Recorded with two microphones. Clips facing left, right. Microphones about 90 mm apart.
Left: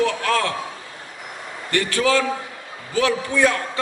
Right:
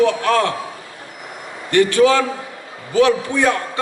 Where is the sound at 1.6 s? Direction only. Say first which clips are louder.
Right 7 dB; 20° right (ahead or behind).